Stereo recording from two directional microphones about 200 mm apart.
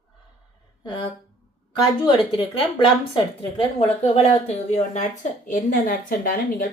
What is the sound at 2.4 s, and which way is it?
A woman's voice, 25° left (ahead or behind).